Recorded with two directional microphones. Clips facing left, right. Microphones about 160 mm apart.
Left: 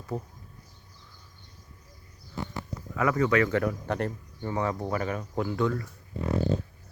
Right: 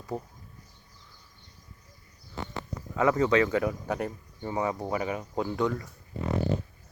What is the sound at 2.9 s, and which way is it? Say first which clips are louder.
Speech: right 1 dB; 25° right (ahead or behind).